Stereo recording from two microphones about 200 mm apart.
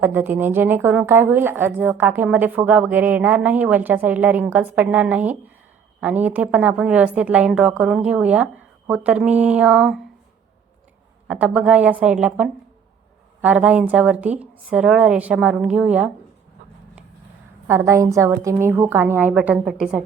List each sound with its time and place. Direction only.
0.0 s speech: 10° right (ahead or behind)
11.3 s a woman's voice: 5° right (ahead or behind)
17.7 s speech: 15° right (ahead or behind)